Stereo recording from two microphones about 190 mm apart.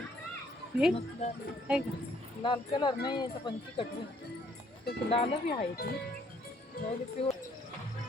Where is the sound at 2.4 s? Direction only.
25° left (ahead or behind).